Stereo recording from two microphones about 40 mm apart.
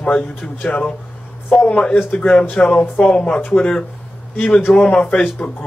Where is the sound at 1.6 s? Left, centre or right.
Left.